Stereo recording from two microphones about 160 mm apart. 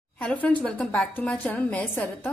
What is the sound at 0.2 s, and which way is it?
A woman's voice, 10° left (ahead or behind).